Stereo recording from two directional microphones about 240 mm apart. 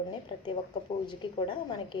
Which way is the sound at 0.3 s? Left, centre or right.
Centre.